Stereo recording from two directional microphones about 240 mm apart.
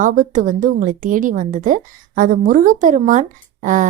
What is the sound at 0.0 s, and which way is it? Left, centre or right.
A woman's voice, right.